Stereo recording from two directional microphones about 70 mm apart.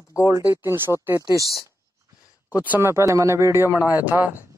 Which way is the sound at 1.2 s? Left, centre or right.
Right.